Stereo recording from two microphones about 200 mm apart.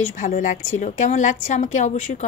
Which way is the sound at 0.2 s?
40° left (ahead or behind).